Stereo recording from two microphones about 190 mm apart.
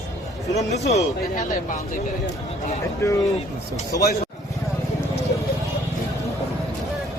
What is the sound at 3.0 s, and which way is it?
Speech, 15° left (ahead or behind).